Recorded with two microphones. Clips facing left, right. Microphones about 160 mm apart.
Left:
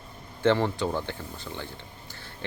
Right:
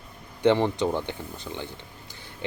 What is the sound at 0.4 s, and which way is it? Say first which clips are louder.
Speech: right 2 dB; 20° right (ahead or behind).